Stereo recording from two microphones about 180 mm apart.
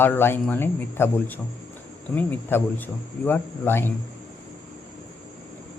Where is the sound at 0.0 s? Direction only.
10° left (ahead or behind).